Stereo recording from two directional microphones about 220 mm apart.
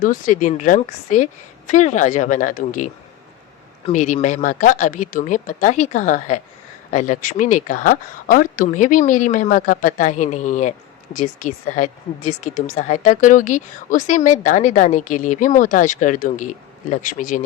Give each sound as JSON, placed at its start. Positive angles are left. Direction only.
{"t": 0.0, "sound": "speech", "side_deg": 35}